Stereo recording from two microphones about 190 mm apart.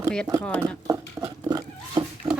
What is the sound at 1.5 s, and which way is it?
Pig, 20° right (ahead or behind).